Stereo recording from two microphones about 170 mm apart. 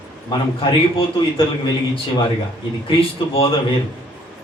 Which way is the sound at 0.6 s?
30° left (ahead or behind).